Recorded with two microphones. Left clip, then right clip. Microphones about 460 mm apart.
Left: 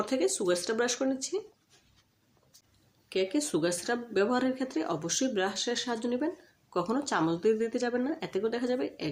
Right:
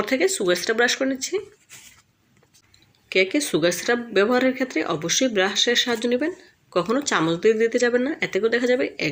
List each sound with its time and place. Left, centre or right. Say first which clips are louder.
0.0 s speech: right 8 dB; right
3.1 s speech: right 9 dB; right